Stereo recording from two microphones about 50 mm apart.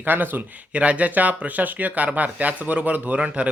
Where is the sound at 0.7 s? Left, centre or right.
Right.